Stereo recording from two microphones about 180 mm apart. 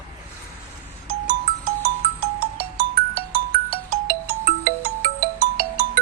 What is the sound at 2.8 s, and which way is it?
Ringtone, 60° right (ahead or behind).